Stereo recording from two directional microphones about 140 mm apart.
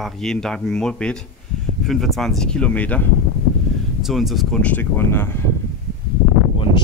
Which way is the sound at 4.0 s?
Centre (ahead or behind).